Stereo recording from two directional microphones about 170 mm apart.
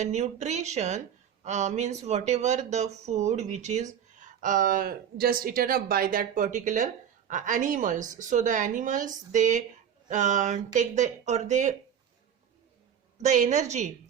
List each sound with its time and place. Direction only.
0.0 s speech: 45° right (ahead or behind)
13.1 s speech: 45° right (ahead or behind)